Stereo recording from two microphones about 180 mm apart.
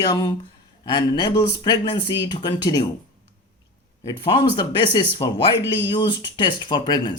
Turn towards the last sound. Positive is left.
turn(degrees=25)  # may be behind; listen again after turning